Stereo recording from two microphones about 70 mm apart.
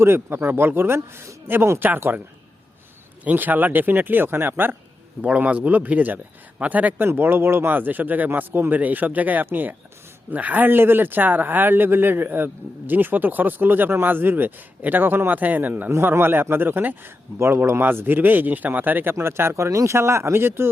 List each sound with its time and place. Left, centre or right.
0.0 s speech: right
3.2 s speech: right
15.9 s speech: right
17.3 s speech: right
19.1 s speech: right